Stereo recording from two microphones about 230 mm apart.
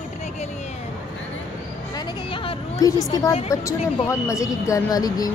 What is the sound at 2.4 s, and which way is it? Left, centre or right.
Speech, centre.